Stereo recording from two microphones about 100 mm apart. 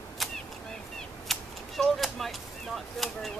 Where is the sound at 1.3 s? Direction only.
Centre (ahead or behind).